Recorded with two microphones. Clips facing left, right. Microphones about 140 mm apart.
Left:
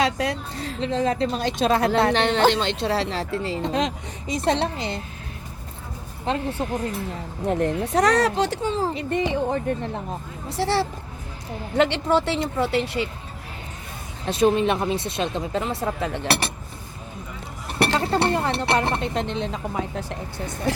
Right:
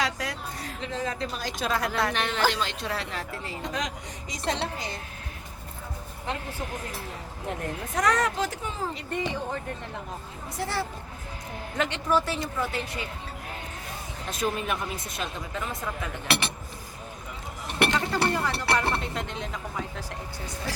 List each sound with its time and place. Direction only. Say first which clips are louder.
0.0 s a woman's voice: left 7 dB; 25° left (ahead or behind)
6.2 s a woman's voice: left 9 dB; 25° left (ahead or behind)
14.3 s a woman's voice: left 10 dB; 30° left (ahead or behind)
17.7 s a woman's voice: left 4 dB; 35° left (ahead or behind)
20.4 s speech: left 10 dB; 55° left (ahead or behind)